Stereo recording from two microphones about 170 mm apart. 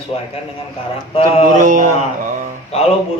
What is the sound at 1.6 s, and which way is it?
Speech, 50° right (ahead or behind).